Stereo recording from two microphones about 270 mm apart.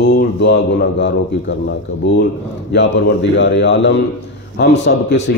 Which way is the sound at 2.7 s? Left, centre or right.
Left.